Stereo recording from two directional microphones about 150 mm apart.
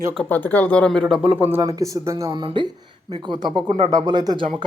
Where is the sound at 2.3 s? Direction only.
30° right (ahead or behind).